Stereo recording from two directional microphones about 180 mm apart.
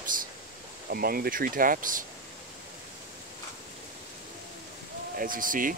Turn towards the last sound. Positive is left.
turn(degrees=-50)  # may be behind; listen again after turning